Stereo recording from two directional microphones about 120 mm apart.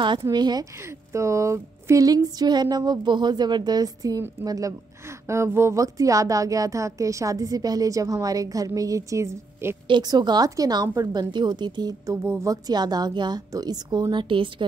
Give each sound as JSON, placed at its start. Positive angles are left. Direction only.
{"t": 0.0, "sound": "speech", "side_deg": -40}
{"t": 0.8, "sound": "a woman's voice", "side_deg": -25}
{"t": 9.8, "sound": "speech", "side_deg": -40}
{"t": 12.2, "sound": "speech", "side_deg": -25}